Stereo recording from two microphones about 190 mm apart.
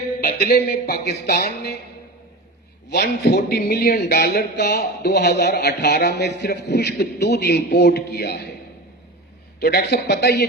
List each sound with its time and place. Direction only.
0.2 s speech: 55° left (ahead or behind)
2.9 s speech: 55° left (ahead or behind)
9.6 s speech: 60° left (ahead or behind)